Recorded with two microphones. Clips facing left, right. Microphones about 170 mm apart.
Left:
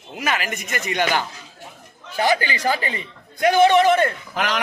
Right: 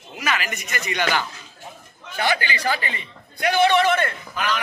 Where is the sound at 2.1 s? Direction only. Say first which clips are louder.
Left 3 dB; 40° left (ahead or behind).